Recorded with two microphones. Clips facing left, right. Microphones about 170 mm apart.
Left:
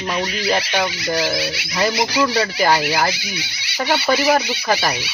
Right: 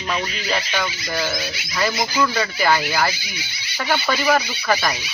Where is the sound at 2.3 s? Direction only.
35° left (ahead or behind).